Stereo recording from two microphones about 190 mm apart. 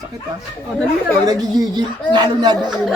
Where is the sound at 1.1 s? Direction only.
20° right (ahead or behind).